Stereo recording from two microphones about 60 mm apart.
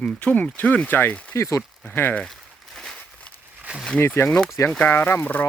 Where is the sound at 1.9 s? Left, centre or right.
Left.